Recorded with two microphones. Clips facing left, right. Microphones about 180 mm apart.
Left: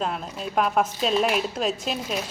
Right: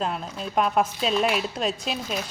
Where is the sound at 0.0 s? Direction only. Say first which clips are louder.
Even; centre (ahead or behind).